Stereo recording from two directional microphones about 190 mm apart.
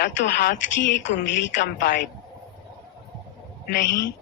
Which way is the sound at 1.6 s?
45° left (ahead or behind).